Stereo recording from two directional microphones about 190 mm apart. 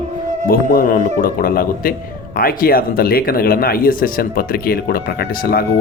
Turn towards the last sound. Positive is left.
turn(degrees=55)  # may be behind; listen again after turning